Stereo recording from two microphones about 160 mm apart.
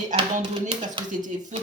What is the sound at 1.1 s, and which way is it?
Speech, 50° right (ahead or behind).